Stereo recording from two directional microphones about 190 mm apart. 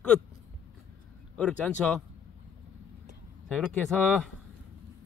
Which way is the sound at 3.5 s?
Centre (ahead or behind).